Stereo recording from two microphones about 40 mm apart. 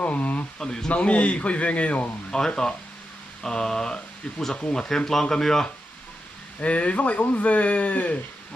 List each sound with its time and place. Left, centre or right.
0.0 s speech: left
0.6 s speech: centre
0.9 s speech: left
2.3 s speech: centre
6.6 s speech: left